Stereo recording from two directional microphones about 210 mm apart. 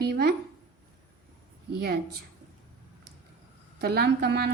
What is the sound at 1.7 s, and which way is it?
Speech, 50° right (ahead or behind).